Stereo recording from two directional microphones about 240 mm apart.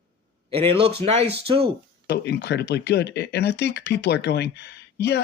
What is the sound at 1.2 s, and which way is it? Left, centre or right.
Speech, right.